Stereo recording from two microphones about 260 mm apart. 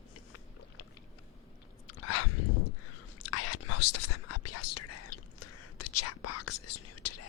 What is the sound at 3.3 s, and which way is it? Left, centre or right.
Whispering, left.